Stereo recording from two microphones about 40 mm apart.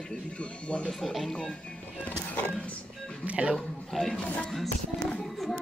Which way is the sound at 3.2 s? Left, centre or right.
Right.